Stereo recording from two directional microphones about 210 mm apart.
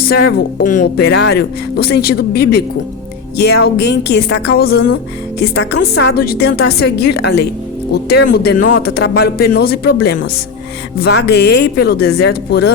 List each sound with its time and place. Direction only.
0.0 s speech: 45° left (ahead or behind)